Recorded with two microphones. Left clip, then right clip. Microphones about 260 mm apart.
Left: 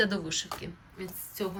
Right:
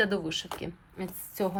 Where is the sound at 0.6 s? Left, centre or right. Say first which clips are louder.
Right 3 dB; centre.